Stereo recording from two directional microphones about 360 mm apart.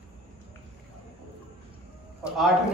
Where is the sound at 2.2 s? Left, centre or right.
Centre.